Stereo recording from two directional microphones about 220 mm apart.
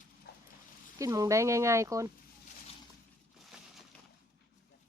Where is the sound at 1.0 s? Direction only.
15° right (ahead or behind).